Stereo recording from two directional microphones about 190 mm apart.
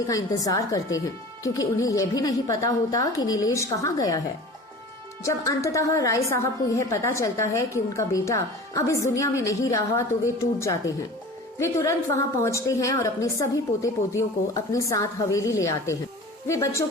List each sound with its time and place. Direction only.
0.1 s a woman's voice: 20° left (ahead or behind)
5.2 s a woman's voice: 15° left (ahead or behind)